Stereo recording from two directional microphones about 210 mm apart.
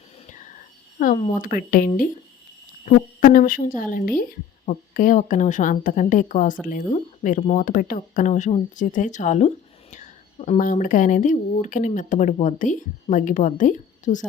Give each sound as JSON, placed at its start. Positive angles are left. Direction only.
{"t": 0.9, "sound": "speech", "side_deg": 40}